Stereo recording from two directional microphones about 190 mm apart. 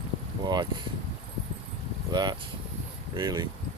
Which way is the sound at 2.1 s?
25° right (ahead or behind).